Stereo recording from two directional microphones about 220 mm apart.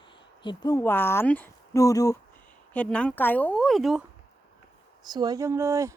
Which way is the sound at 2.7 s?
5° left (ahead or behind).